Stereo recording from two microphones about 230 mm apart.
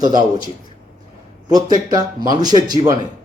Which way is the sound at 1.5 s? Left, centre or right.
Centre.